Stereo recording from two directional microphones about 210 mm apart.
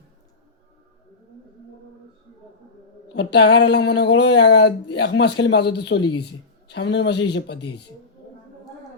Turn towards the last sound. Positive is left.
turn(degrees=55)  # may be behind; listen again after turning